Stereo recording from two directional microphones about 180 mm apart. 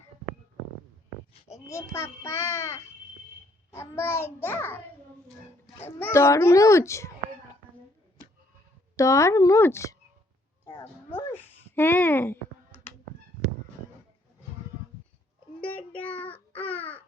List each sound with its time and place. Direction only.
1.5 s a child's voice: 15° left (ahead or behind)
5.8 s a child's voice: 15° left (ahead or behind)
9.0 s a child's voice: 15° left (ahead or behind)
11.2 s finger snapping: 10° left (ahead or behind)
16.0 s child singing: 10° left (ahead or behind)
16.3 s a sound: 10° left (ahead or behind)